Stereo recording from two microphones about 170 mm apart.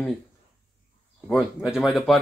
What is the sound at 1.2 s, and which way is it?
Speech, centre (ahead or behind).